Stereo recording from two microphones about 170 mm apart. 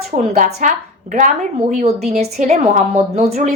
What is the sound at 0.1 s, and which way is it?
A woman's voice, 50° right (ahead or behind).